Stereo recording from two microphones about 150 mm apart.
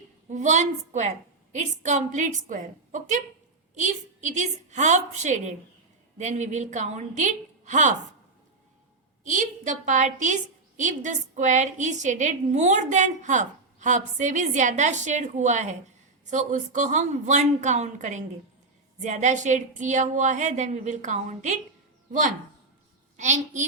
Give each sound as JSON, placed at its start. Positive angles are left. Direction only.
{"t": 0.3, "sound": "a woman's voice", "side_deg": -50}
{"t": 9.2, "sound": "a woman's voice", "side_deg": -55}
{"t": 23.1, "sound": "a woman's voice", "side_deg": -50}